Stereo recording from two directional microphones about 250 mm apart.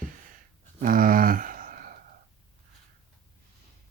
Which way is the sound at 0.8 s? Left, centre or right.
Right.